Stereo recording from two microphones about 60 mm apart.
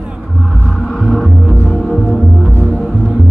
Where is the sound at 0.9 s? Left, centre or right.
Centre.